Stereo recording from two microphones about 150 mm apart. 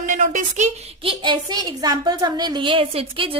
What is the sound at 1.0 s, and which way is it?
A woman's voice, 35° right (ahead or behind).